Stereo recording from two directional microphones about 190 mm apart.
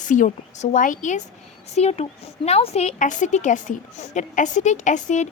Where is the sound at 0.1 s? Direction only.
40° left (ahead or behind).